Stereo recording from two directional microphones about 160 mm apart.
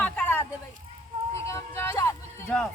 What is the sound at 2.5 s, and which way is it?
Speech, 5° left (ahead or behind).